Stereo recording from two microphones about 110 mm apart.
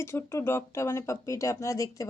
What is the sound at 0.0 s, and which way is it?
Speech, 25° left (ahead or behind).